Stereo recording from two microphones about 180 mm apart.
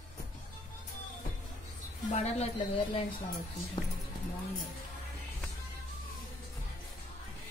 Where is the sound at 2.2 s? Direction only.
35° left (ahead or behind).